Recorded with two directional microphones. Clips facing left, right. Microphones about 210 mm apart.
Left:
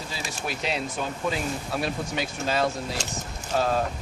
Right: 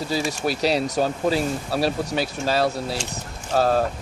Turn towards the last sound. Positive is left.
turn(degrees=-45)  # may be behind; listen again after turning